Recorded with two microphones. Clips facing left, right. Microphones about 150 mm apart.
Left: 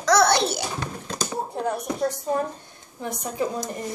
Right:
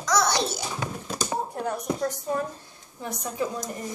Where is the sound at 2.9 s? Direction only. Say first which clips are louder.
Left 2 dB; 30° left (ahead or behind).